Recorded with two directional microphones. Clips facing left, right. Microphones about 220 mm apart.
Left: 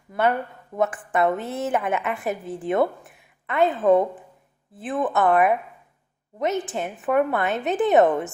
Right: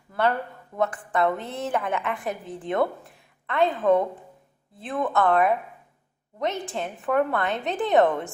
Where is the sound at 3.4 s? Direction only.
20° left (ahead or behind).